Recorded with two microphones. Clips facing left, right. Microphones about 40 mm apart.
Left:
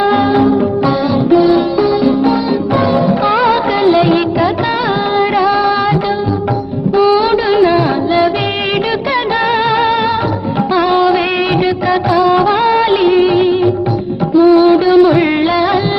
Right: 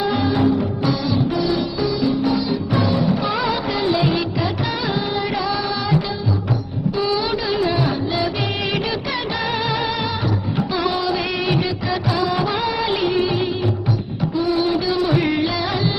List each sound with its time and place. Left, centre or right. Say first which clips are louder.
0.0 s music: left 8 dB; left
3.2 s music of bollywood: left 10 dB; left
5.1 s music: left 10 dB; left
6.9 s music: left 11 dB; left
7.5 s singing: left 9 dB; left
9.5 s music: left 10 dB; left
11.9 s music of bollywood: left 11 dB; left
12.9 s music: left 9 dB; left